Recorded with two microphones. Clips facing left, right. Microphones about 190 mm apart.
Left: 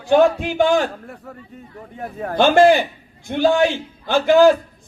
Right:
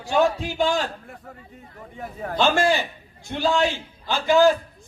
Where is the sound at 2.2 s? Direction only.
50° left (ahead or behind).